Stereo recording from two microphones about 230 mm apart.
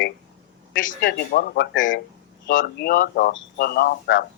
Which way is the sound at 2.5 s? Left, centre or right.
Left.